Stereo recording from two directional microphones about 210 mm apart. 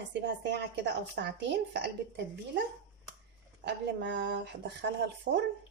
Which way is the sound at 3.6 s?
55° right (ahead or behind).